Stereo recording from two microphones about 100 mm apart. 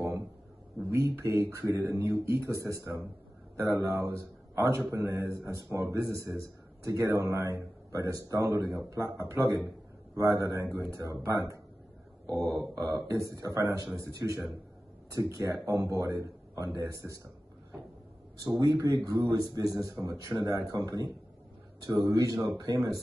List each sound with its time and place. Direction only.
0.8 s a man's voice: 30° right (ahead or behind)
3.5 s a man's voice: 35° right (ahead or behind)
18.4 s a man's voice: 35° right (ahead or behind)